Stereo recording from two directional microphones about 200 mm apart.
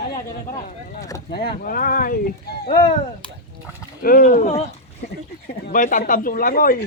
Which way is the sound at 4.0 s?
45° left (ahead or behind).